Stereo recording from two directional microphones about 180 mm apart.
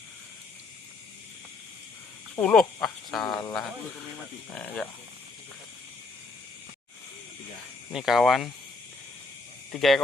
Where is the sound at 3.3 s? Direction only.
20° left (ahead or behind).